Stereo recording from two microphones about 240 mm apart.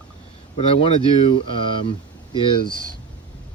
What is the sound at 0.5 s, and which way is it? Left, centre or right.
Speech, left.